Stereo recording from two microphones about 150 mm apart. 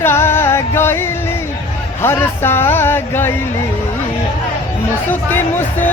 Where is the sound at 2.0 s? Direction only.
15° left (ahead or behind).